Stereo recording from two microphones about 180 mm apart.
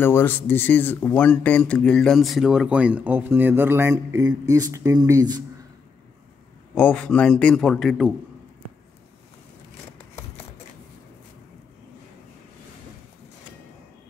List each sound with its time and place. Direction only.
0.0 s speech: 10° left (ahead or behind); by 5.4 s 20° right (ahead or behind)
6.7 s speech: 10° left (ahead or behind)